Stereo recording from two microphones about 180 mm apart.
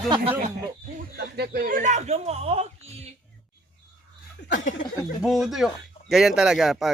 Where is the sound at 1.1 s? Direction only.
60° right (ahead or behind); by 3.1 s 35° right (ahead or behind).